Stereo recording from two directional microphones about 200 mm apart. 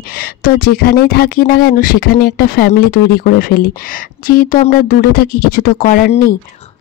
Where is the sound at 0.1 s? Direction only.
50° left (ahead or behind).